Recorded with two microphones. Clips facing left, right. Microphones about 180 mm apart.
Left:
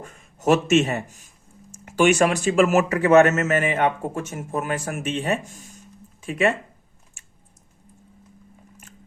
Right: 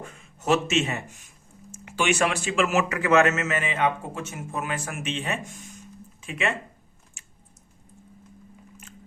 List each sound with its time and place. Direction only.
0.0 s a man's voice: 45° left (ahead or behind)